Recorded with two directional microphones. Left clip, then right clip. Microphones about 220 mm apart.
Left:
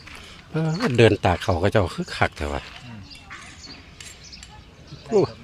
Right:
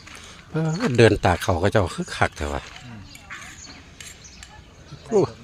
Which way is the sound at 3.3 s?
20° right (ahead or behind).